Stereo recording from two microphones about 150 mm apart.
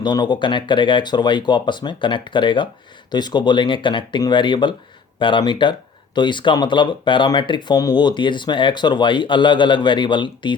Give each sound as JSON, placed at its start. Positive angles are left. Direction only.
{"t": 0.0, "sound": "speech", "side_deg": 30}